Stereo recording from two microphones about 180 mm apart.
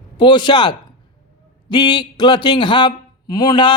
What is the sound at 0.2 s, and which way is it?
Speech, 25° left (ahead or behind).